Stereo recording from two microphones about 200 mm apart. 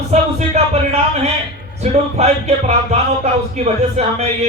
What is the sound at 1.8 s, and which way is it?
A man's voice, 35° right (ahead or behind).